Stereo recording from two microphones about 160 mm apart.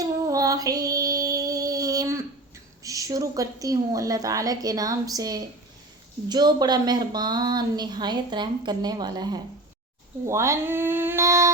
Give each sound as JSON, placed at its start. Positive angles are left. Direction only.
{"t": 0.0, "sound": "female singing", "side_deg": -20}
{"t": 2.8, "sound": "speech", "side_deg": -20}